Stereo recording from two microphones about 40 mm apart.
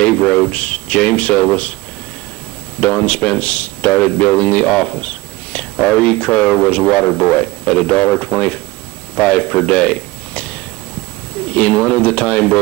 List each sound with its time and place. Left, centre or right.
0.0 s speech: left
2.8 s a man's voice: left